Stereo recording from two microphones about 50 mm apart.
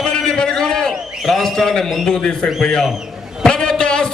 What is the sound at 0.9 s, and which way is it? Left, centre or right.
A man's voice, centre.